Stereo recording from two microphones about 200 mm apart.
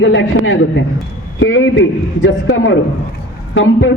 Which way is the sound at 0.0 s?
75° left (ahead or behind).